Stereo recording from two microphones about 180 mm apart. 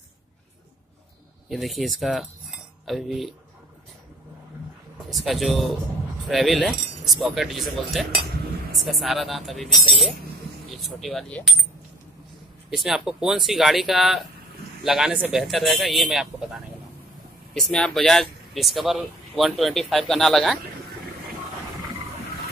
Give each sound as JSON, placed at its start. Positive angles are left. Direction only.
{"t": 1.5, "sound": "speech", "side_deg": 0}
{"t": 5.1, "sound": "speech", "side_deg": 0}
{"t": 8.2, "sound": "dishes", "side_deg": -55}
{"t": 8.7, "sound": "speech", "side_deg": 0}
{"t": 12.7, "sound": "speech", "side_deg": 0}